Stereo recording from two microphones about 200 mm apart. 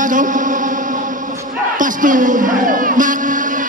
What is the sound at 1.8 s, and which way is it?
Speech, 40° right (ahead or behind).